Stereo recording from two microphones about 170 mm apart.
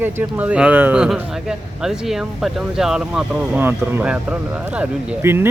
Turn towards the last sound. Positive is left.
turn(degrees=-15)  # may be behind; listen again after turning